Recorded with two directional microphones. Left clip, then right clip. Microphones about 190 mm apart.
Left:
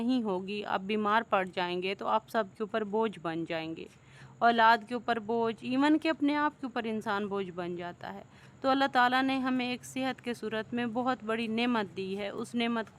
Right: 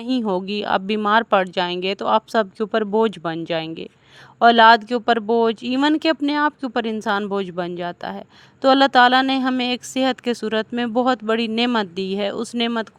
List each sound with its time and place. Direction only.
0.0 s speech: 40° right (ahead or behind)